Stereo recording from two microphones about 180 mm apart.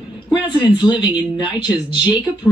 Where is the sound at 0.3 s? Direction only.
25° left (ahead or behind).